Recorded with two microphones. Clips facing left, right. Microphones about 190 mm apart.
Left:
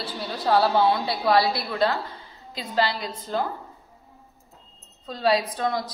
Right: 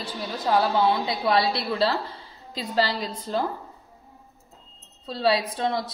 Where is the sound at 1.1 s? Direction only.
25° right (ahead or behind).